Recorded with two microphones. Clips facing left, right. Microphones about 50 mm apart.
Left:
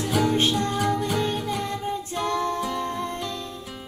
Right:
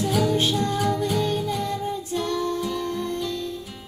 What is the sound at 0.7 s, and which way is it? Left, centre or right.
Music, centre.